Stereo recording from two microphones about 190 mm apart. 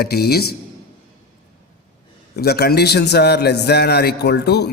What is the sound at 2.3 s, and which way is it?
A man's voice, 55° left (ahead or behind).